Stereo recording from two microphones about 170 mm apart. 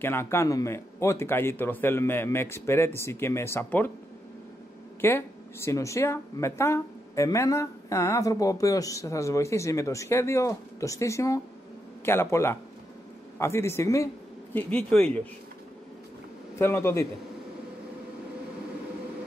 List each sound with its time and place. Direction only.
0.0 s speech: 15° left (ahead or behind)
5.0 s a man's voice: 15° left (ahead or behind)
16.5 s speech: 15° left (ahead or behind)